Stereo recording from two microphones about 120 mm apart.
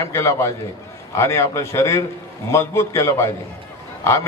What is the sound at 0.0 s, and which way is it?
A man's voice, 25° left (ahead or behind).